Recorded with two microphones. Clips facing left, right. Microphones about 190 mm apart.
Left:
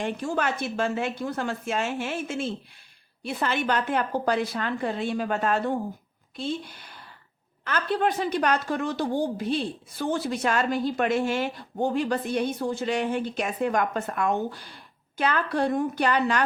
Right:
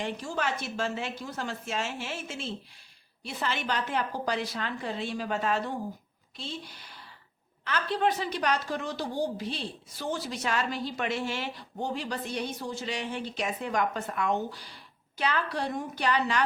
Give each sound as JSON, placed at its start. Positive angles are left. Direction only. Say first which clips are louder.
{"t": 0.0, "sound": "a woman's voice", "louder": "left 5 dB", "side_deg": 55}